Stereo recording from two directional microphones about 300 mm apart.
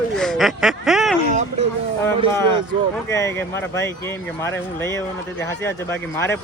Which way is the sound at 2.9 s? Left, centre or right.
Centre.